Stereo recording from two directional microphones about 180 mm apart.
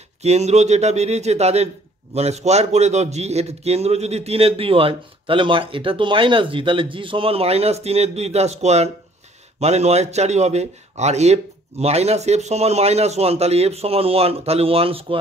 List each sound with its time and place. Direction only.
0.2 s a man's voice: 35° right (ahead or behind)